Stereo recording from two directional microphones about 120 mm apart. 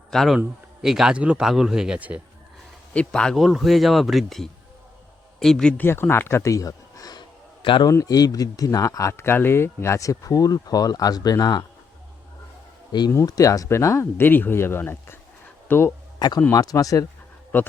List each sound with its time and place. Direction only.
0.1 s speech: 5° left (ahead or behind)
2.9 s speech: 10° left (ahead or behind)
5.8 s speech: 20° left (ahead or behind); by 7.9 s 40° left (ahead or behind)
7.9 s speech: 30° left (ahead or behind)
13.1 s speech: 25° left (ahead or behind)
16.1 s speech: 35° left (ahead or behind)
17.5 s speech: 15° left (ahead or behind)